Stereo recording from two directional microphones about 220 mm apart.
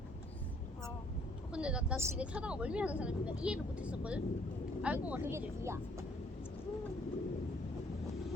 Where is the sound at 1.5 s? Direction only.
5° right (ahead or behind).